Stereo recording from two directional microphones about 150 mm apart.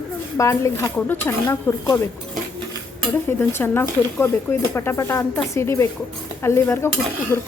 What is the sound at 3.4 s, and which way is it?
A woman's voice, 15° left (ahead or behind).